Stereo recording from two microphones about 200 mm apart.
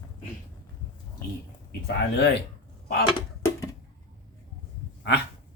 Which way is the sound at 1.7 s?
55° left (ahead or behind).